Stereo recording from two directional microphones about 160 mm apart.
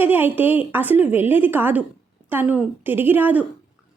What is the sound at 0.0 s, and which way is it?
A woman's voice, 10° right (ahead or behind).